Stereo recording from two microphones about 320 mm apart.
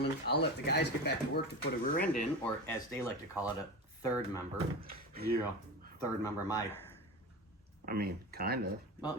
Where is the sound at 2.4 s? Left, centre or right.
Centre.